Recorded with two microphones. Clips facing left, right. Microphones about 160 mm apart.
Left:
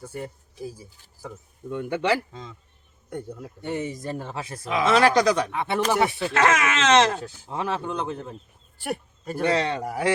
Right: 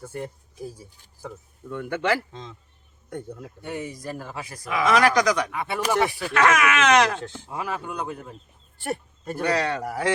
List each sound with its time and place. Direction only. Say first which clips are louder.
0.0 s speech: right 1 dB; centre (ahead or behind)
1.7 s speech: left 1 dB; 15° left (ahead or behind)
3.6 s speech: left 4 dB; 25° left (ahead or behind)
8.8 s speech: even; centre (ahead or behind)
9.4 s speech: left 1 dB; 25° left (ahead or behind)